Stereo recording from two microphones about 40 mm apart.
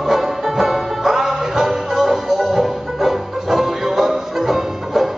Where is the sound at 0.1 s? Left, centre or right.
Centre.